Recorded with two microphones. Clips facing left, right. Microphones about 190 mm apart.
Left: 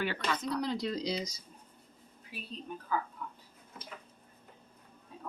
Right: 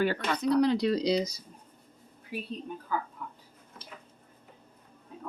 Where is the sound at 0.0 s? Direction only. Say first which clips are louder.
Right 6 dB; 45° right (ahead or behind).